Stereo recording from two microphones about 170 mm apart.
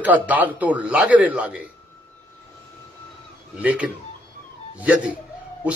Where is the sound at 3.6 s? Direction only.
10° right (ahead or behind).